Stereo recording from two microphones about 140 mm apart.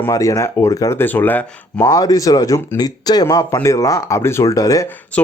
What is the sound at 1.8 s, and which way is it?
Speech, 25° left (ahead or behind).